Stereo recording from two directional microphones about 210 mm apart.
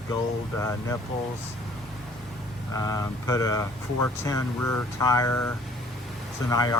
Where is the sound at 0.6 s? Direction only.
15° left (ahead or behind).